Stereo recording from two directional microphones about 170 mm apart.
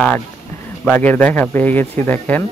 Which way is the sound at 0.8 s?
10° left (ahead or behind).